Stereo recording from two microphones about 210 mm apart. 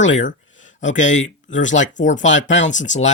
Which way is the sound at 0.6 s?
35° left (ahead or behind).